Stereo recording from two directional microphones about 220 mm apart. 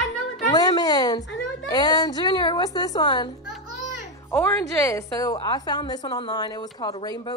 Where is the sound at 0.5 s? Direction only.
15° left (ahead or behind).